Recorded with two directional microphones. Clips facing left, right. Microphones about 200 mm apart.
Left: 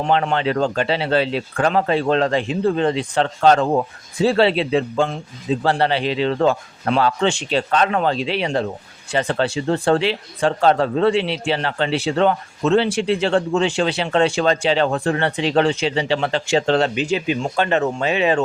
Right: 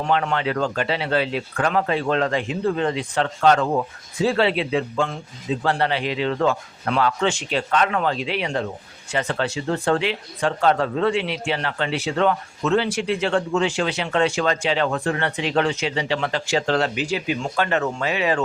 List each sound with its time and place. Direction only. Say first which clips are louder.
0.0 s speech: left 3 dB; 25° left (ahead or behind)